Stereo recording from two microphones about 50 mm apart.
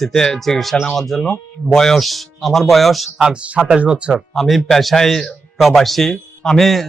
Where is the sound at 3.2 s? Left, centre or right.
Right.